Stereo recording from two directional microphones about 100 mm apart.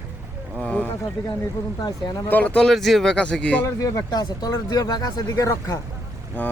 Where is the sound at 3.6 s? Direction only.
30° left (ahead or behind).